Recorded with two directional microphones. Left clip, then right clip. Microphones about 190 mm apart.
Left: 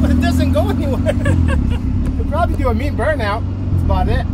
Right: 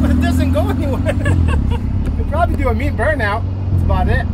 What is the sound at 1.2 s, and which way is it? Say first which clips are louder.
Vehicle: left 1 dB; 20° right (ahead or behind).